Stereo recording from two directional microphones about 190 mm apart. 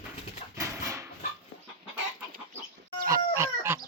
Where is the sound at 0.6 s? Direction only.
15° right (ahead or behind).